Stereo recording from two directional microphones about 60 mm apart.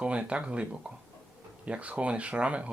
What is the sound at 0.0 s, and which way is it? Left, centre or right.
Speech, right.